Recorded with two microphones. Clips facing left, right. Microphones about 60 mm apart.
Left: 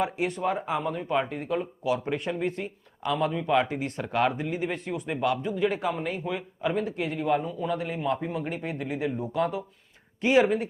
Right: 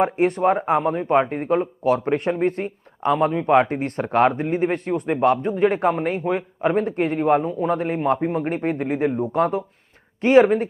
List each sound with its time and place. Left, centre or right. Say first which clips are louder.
0.0 s speech: right 9 dB; right